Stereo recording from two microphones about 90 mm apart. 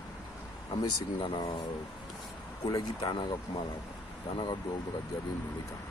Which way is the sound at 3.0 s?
60° left (ahead or behind).